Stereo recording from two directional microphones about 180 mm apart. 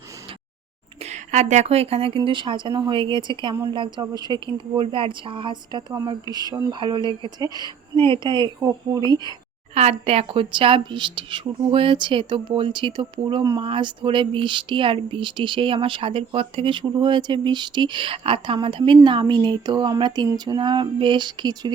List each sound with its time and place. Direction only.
1.1 s speech: 40° right (ahead or behind); by 9.3 s 25° right (ahead or behind)
9.7 s speech: 35° right (ahead or behind)